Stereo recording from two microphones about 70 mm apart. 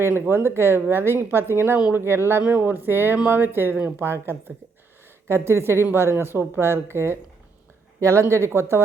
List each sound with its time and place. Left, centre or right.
0.3 s speech: right
2.4 s speech: right